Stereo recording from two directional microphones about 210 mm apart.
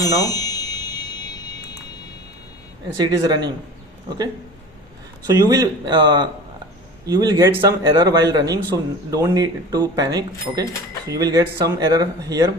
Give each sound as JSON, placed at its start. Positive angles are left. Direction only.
{"t": 0.0, "sound": "music", "side_deg": 15}
{"t": 3.0, "sound": "speech", "side_deg": -20}
{"t": 5.2, "sound": "a man's voice", "side_deg": -15}